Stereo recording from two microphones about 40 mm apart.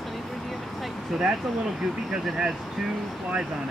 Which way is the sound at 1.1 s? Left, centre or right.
Centre.